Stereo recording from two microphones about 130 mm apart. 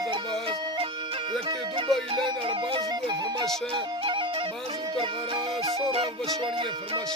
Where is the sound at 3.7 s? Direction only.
40° right (ahead or behind).